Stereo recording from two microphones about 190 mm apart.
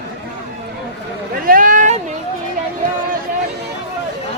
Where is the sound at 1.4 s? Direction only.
45° right (ahead or behind).